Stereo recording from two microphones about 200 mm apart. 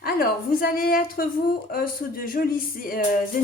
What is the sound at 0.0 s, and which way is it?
Speech, 50° left (ahead or behind).